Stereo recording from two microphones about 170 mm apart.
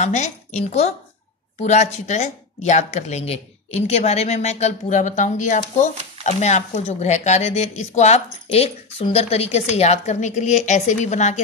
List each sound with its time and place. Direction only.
0.0 s speech: 45° left (ahead or behind)